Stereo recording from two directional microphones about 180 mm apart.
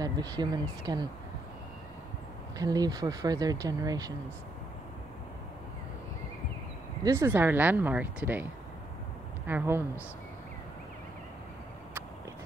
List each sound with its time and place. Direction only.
0.0 s speech: 20° right (ahead or behind)
2.6 s speech: 20° right (ahead or behind)
7.1 s speech: 15° right (ahead or behind)
9.5 s speech: 10° right (ahead or behind)